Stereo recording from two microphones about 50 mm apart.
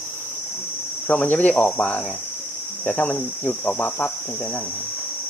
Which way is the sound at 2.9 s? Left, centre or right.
Left.